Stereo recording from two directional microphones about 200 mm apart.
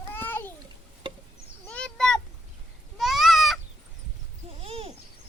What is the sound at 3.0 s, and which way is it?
Goat, centre (ahead or behind).